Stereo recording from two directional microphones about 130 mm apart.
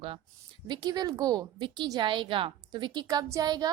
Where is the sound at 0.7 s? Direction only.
30° right (ahead or behind).